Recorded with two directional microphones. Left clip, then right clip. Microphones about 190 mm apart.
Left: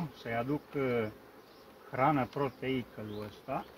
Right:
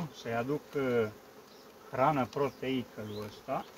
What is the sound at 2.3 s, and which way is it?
Speech, 5° left (ahead or behind).